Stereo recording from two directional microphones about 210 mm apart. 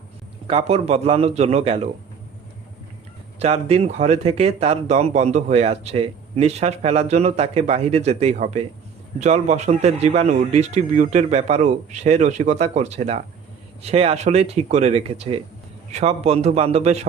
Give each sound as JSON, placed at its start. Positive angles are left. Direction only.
{"t": 0.4, "sound": "speech", "side_deg": -30}
{"t": 3.4, "sound": "speech", "side_deg": -30}